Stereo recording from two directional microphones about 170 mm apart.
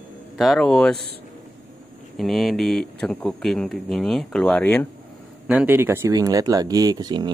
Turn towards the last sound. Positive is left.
turn(degrees=-25)  # may be behind; listen again after turning